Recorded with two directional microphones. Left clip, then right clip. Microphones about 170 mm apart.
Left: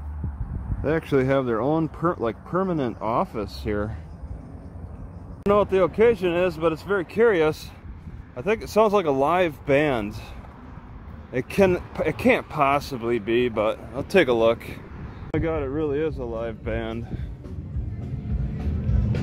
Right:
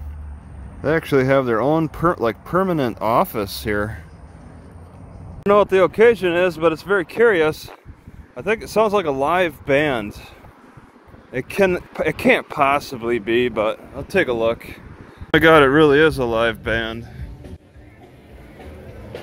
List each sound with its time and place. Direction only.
0.8 s speech: 5° right (ahead or behind)
5.5 s speech: 15° right (ahead or behind)
11.3 s speech: centre (ahead or behind)
13.9 s speech: 10° left (ahead or behind)
15.3 s speech: 20° right (ahead or behind)
16.6 s speech: 5° right (ahead or behind)